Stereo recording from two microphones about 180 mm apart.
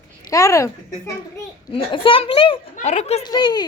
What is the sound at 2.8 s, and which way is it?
Speech, 40° left (ahead or behind).